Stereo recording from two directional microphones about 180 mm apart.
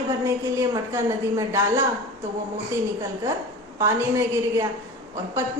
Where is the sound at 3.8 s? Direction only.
15° right (ahead or behind).